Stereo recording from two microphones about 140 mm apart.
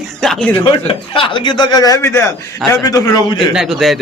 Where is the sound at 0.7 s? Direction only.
35° left (ahead or behind).